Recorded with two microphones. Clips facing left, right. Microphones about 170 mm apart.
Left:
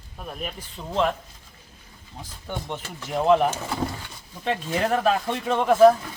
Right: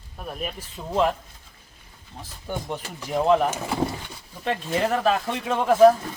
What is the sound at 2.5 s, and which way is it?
Speech, 5° right (ahead or behind).